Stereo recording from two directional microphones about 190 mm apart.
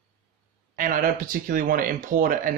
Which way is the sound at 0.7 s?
45° right (ahead or behind).